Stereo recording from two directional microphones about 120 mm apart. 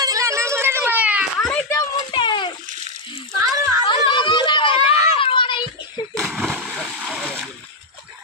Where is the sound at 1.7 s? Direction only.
30° left (ahead or behind).